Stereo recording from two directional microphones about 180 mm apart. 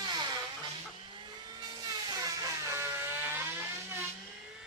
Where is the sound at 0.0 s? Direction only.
25° right (ahead or behind).